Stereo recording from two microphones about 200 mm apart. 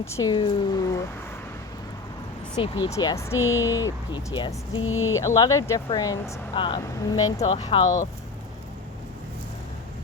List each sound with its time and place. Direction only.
0.0 s speech: 15° left (ahead or behind)
2.6 s speech: 25° left (ahead or behind)
4.8 s speech: 90° left
5.1 s speech: 15° left (ahead or behind)
7.3 s speech: 30° left (ahead or behind)